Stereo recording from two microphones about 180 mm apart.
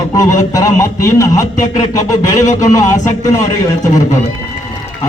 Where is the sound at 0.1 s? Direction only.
20° left (ahead or behind).